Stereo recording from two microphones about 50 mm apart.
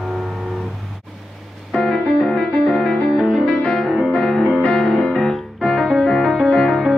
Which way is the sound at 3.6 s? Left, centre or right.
Centre.